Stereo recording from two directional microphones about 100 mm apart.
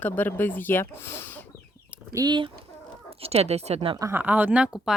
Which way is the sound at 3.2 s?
90° right.